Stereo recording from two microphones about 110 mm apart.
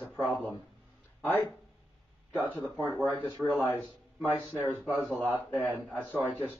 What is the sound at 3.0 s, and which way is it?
Speech, 20° right (ahead or behind).